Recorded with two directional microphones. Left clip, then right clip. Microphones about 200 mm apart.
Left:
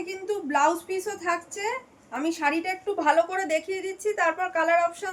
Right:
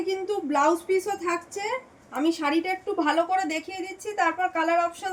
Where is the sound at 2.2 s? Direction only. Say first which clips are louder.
Right 1 dB; 20° left (ahead or behind).